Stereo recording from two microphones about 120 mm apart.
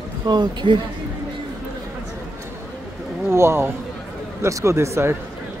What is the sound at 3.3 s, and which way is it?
Speech, 20° right (ahead or behind).